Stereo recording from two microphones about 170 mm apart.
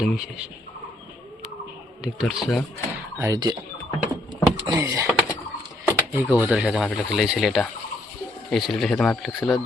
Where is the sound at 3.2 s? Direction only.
20° right (ahead or behind).